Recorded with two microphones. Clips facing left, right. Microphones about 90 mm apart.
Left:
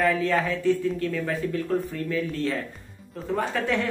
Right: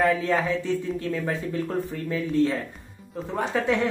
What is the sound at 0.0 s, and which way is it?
Speech, 20° right (ahead or behind).